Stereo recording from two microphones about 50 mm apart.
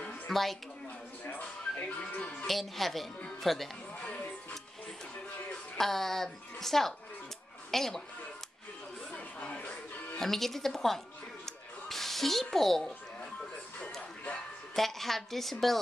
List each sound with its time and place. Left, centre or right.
0.3 s speech: centre
1.2 s speech: left
2.4 s speech: centre
4.0 s music: left
5.8 s a woman's voice: centre
9.1 s a sound: left
10.1 s speech: centre
11.4 s music: centre
14.8 s speech: centre